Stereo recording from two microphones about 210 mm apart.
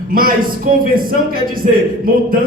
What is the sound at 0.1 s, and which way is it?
A man's voice, 45° right (ahead or behind).